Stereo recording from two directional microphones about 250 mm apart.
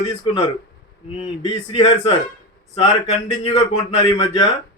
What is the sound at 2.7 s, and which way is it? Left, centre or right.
Speech, left.